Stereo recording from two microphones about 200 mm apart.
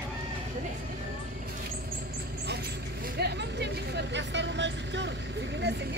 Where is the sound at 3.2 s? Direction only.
55° right (ahead or behind).